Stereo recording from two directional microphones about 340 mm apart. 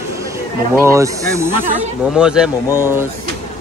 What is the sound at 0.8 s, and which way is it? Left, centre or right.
A man's voice, centre.